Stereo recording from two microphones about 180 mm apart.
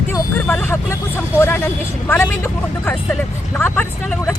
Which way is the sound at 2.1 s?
10° left (ahead or behind).